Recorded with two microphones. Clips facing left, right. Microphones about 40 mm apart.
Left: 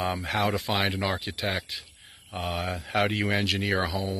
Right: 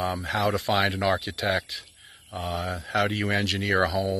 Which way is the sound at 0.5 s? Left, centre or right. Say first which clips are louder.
Right 3 dB; centre.